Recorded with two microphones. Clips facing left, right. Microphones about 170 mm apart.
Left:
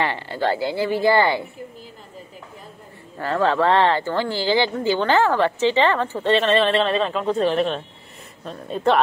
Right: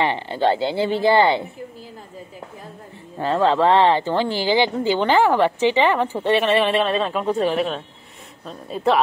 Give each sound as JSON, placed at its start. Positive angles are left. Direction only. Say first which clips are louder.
{"t": 0.0, "sound": "speech", "louder": "right 3 dB", "side_deg": -20}
{"t": 3.2, "sound": "speech", "louder": "right 2 dB", "side_deg": -20}